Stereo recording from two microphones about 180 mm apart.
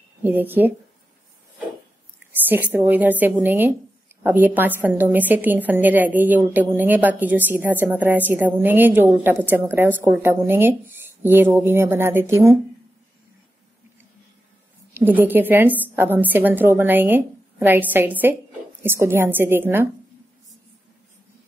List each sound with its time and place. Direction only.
0.2 s a woman's voice: 10° right (ahead or behind)
2.4 s a woman's voice: 10° right (ahead or behind)
15.0 s a woman's voice: 10° right (ahead or behind)